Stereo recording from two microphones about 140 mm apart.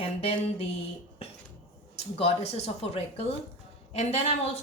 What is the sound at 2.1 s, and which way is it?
Speech, 45° left (ahead or behind).